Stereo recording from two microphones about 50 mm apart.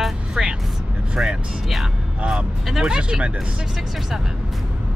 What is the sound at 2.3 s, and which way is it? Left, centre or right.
Speech, centre.